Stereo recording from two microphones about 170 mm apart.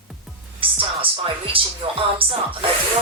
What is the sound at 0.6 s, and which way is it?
Music, 30° right (ahead or behind).